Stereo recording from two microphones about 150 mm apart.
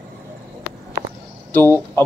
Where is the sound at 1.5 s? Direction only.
15° left (ahead or behind).